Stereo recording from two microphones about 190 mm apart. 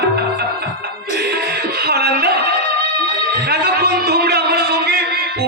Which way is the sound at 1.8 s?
55° right (ahead or behind).